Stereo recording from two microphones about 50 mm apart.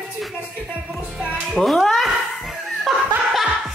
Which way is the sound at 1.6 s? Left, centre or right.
Centre.